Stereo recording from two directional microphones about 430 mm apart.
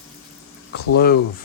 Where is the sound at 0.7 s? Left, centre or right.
Left.